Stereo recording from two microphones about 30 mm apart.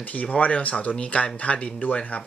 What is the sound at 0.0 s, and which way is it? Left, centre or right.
Speech, left.